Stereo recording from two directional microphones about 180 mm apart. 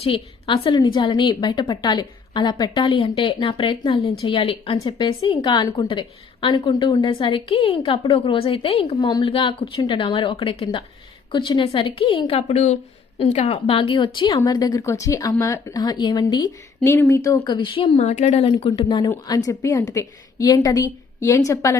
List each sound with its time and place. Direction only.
0.0 s a woman's voice: 30° left (ahead or behind)